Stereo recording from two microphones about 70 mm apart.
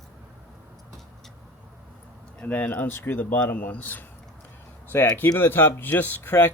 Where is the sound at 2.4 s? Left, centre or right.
Left.